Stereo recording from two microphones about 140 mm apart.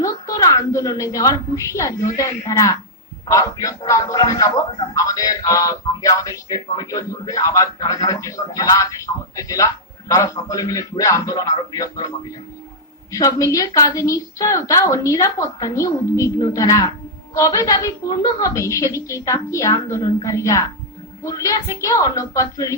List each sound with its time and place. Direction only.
0.0 s a woman's voice: 25° left (ahead or behind)